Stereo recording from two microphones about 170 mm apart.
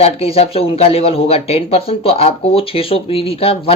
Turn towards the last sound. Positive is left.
turn(degrees=35)  # may be behind; listen again after turning